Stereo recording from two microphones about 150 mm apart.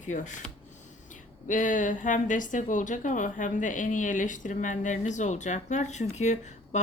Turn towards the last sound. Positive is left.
turn(degrees=50)  # may be behind; listen again after turning